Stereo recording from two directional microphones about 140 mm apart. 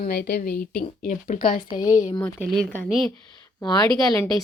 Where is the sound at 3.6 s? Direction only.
30° left (ahead or behind).